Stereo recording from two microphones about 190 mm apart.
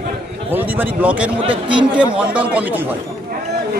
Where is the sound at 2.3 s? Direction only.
5° right (ahead or behind).